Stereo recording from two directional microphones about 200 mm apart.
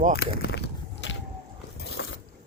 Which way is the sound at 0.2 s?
55° left (ahead or behind).